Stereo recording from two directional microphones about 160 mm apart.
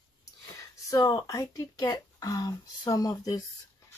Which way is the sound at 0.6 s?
20° left (ahead or behind).